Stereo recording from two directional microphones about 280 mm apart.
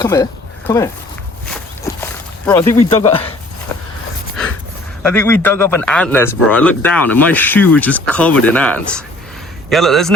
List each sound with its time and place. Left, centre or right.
0.0 s speech: centre
2.5 s speech: centre
2.9 s speech: centre
5.0 s a man's voice: centre